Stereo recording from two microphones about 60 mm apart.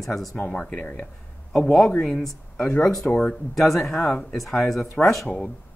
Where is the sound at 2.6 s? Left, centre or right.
Left.